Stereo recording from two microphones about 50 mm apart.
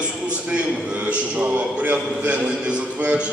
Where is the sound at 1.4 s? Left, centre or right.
Right.